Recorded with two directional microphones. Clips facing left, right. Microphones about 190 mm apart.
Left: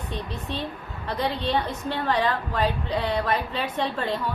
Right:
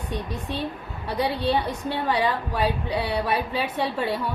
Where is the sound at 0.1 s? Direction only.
10° right (ahead or behind).